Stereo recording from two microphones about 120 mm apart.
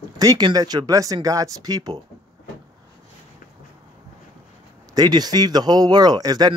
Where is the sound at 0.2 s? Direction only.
30° right (ahead or behind).